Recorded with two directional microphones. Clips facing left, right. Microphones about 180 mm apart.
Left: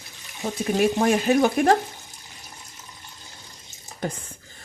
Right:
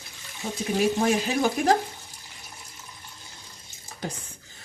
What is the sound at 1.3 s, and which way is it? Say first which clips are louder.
Speech: left 5 dB; 60° left (ahead or behind).